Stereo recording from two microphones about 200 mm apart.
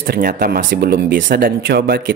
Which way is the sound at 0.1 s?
50° right (ahead or behind).